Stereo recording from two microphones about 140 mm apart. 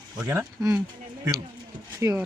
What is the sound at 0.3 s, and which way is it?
Speech, 20° right (ahead or behind).